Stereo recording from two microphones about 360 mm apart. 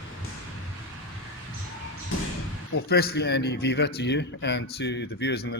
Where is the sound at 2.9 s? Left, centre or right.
Left.